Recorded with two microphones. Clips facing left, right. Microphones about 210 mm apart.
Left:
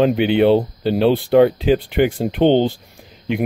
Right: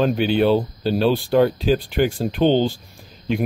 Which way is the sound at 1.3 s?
65° left (ahead or behind).